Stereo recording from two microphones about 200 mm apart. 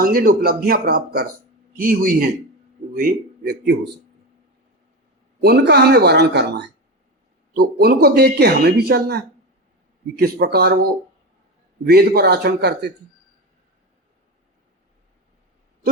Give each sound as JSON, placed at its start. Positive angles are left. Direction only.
{"t": 0.0, "sound": "speech", "side_deg": -45}
{"t": 5.4, "sound": "speech", "side_deg": -55}